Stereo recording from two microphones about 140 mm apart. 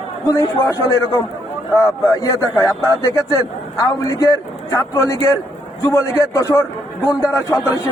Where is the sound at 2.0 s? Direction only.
25° left (ahead or behind).